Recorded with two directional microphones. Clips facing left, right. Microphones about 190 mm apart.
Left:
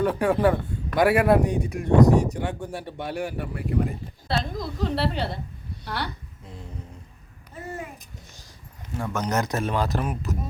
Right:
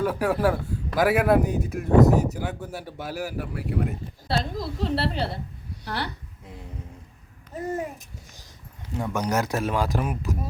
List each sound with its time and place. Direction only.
0.0 s a man's voice: 5° right (ahead or behind)
6.4 s a sound: 15° right (ahead or behind)
7.5 s babbling: 40° right (ahead or behind)
9.0 s speech: 10° right (ahead or behind)